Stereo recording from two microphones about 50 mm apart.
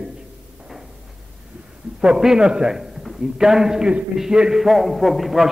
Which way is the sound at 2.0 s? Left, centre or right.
Centre.